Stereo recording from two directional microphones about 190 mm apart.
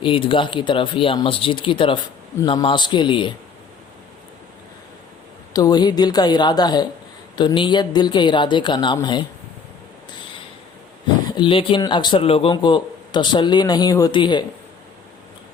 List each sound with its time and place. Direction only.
0.0 s speech: 25° left (ahead or behind)
5.5 s speech: 20° left (ahead or behind)
11.3 s speech: 25° left (ahead or behind)